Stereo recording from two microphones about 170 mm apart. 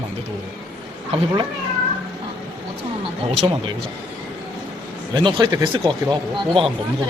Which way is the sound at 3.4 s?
25° right (ahead or behind).